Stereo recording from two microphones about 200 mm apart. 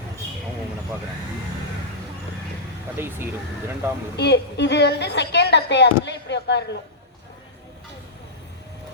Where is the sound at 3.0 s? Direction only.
10° right (ahead or behind).